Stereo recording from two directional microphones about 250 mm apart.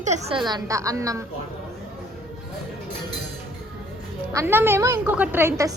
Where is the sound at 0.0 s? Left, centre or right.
Right.